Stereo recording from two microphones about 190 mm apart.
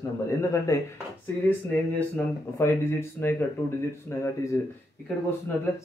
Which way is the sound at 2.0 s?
10° left (ahead or behind).